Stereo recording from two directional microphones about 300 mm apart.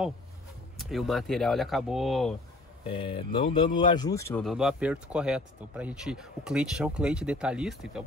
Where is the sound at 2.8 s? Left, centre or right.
Centre.